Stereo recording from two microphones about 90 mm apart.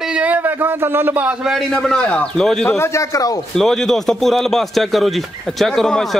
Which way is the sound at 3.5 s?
5° left (ahead or behind).